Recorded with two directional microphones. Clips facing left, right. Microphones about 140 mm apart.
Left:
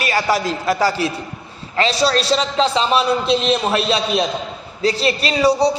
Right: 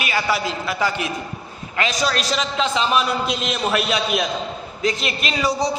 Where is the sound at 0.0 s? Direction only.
40° left (ahead or behind).